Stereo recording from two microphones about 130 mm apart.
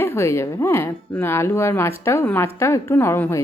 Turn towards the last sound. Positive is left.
turn(degrees=20)  # may be behind; listen again after turning